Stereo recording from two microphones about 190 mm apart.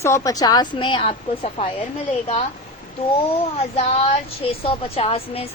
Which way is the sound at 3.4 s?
30° left (ahead or behind).